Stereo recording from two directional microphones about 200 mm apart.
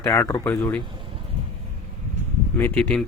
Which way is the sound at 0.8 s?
25° right (ahead or behind).